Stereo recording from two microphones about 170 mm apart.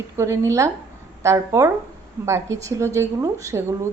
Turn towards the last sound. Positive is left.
turn(degrees=-20)  # may be behind; listen again after turning